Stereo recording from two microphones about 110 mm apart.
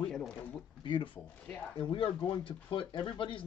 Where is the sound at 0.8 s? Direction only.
45° left (ahead or behind).